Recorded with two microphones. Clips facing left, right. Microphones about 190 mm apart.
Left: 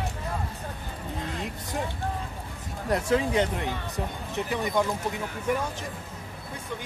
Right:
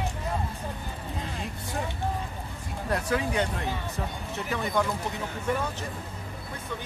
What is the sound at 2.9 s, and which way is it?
Speech, 20° left (ahead or behind).